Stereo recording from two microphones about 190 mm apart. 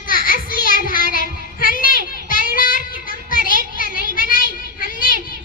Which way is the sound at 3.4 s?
50° right (ahead or behind).